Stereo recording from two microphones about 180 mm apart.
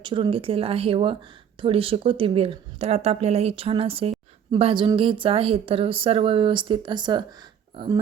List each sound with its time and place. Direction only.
0.0 s speech: 25° right (ahead or behind)